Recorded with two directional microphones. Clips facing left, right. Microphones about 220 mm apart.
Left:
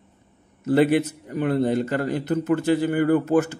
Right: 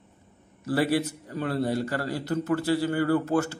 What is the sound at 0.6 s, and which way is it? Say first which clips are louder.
A man's voice: left 6 dB; 20° left (ahead or behind).